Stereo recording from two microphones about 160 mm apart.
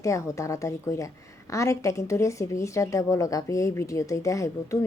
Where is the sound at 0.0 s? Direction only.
20° left (ahead or behind).